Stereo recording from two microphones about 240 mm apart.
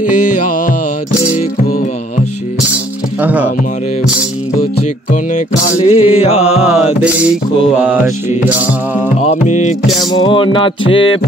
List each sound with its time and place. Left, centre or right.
3.2 s speech: centre
5.9 s music: left
7.0 s music: centre
9.2 s music: left
9.9 s music: centre